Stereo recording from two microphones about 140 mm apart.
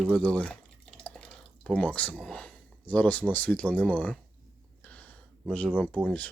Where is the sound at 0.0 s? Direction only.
5° left (ahead or behind).